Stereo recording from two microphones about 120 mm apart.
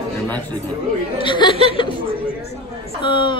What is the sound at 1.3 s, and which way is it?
Speech, 40° left (ahead or behind).